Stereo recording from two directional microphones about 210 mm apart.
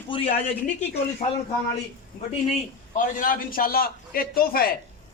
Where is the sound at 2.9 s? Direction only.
40° left (ahead or behind).